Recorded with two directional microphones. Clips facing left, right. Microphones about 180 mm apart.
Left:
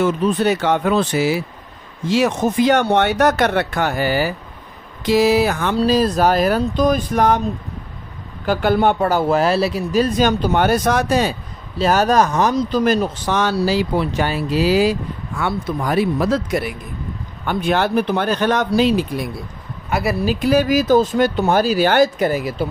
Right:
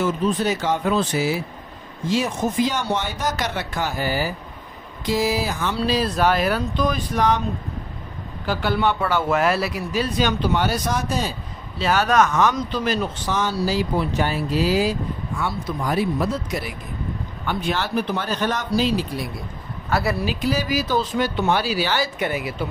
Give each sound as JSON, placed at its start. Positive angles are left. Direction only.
{"t": 0.0, "sound": "speech", "side_deg": 65}
{"t": 5.8, "sound": "speech", "side_deg": 45}
{"t": 8.5, "sound": "speech", "side_deg": 50}
{"t": 9.9, "sound": "speech", "side_deg": 45}
{"t": 11.8, "sound": "speech", "side_deg": 40}
{"t": 13.3, "sound": "speech", "side_deg": 75}
{"t": 19.9, "sound": "speech", "side_deg": 20}
{"t": 20.2, "sound": "speech", "side_deg": 55}
{"t": 22.2, "sound": "speech", "side_deg": 40}